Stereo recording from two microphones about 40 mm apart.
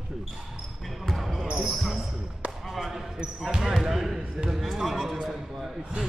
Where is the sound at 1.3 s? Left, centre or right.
Centre.